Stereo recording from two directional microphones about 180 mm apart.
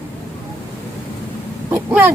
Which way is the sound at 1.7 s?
10° right (ahead or behind).